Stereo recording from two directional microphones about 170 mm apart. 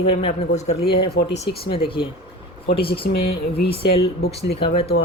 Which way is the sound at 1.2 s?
90° left.